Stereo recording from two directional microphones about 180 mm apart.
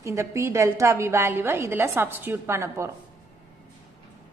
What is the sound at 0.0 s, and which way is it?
A woman's voice, 15° right (ahead or behind).